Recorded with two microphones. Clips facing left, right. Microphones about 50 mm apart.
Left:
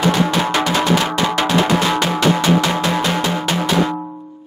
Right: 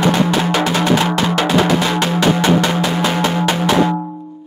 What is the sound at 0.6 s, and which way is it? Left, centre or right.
Music, right.